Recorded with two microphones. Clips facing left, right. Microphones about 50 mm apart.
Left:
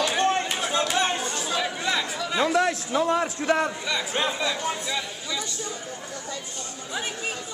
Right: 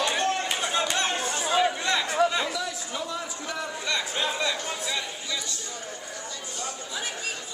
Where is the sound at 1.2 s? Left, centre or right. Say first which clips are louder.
Right 3 dB; centre.